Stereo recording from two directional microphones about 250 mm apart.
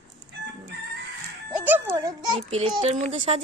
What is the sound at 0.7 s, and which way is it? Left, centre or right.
Chicken, right.